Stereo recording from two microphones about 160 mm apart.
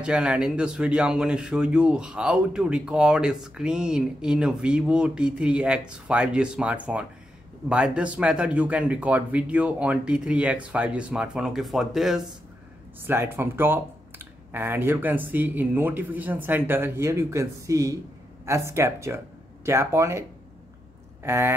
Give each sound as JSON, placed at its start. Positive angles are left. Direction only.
{"t": 0.0, "sound": "speech", "side_deg": -5}
{"t": 13.0, "sound": "speech", "side_deg": -15}
{"t": 21.2, "sound": "a sound", "side_deg": -15}